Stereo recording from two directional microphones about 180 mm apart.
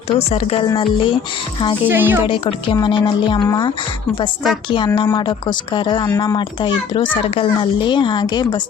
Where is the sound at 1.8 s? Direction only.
10° right (ahead or behind).